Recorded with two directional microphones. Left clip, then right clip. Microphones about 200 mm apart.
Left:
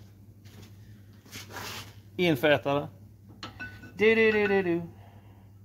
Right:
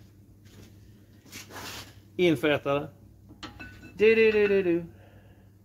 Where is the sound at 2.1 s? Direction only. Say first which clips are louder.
Even; 30° left (ahead or behind).